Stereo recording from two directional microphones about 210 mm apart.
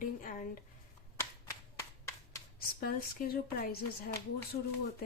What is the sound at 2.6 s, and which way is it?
Speech, 45° left (ahead or behind).